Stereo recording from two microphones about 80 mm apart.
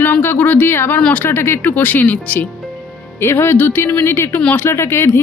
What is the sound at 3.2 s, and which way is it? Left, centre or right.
A woman's voice, left.